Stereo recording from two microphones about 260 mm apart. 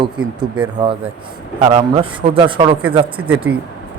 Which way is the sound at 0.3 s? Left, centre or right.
Centre.